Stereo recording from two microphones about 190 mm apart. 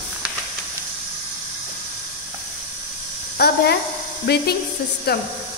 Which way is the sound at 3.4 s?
60° left (ahead or behind).